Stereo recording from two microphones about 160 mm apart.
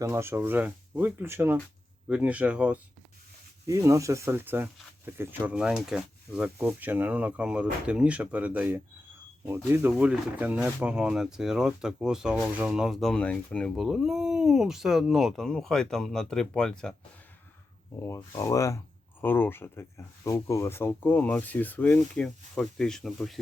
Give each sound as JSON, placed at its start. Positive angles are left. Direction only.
{"t": 0.0, "sound": "speech", "side_deg": -15}
{"t": 3.7, "sound": "speech", "side_deg": -20}
{"t": 18.0, "sound": "speech", "side_deg": 20}